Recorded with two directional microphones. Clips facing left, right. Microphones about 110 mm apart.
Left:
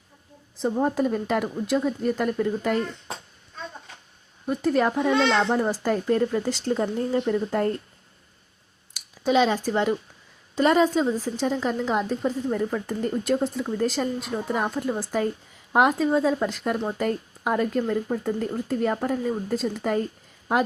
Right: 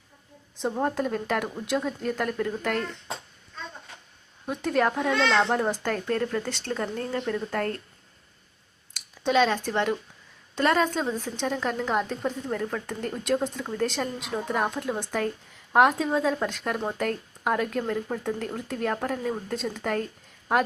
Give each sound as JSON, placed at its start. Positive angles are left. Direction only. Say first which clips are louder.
{"t": 0.5, "sound": "a woman's voice", "louder": "left 3 dB", "side_deg": 0}
{"t": 4.4, "sound": "a woman's voice", "louder": "left 3 dB", "side_deg": 5}
{"t": 5.1, "sound": "speech", "louder": "left 3 dB", "side_deg": 15}
{"t": 5.5, "sound": "speech", "louder": "left 3 dB", "side_deg": 5}
{"t": 8.9, "sound": "a woman's voice", "louder": "left 3 dB", "side_deg": 5}